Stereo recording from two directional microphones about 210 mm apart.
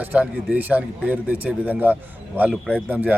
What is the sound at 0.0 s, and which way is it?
Speech, 5° right (ahead or behind).